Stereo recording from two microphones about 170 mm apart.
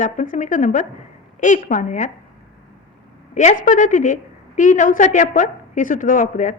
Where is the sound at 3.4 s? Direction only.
50° left (ahead or behind).